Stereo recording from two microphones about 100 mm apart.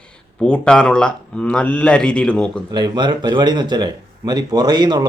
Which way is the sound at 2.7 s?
50° right (ahead or behind).